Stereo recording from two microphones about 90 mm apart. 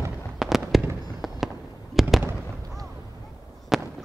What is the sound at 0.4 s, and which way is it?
Fireworks, centre (ahead or behind).